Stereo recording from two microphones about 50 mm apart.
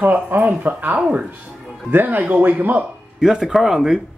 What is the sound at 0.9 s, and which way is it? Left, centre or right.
Speech, right.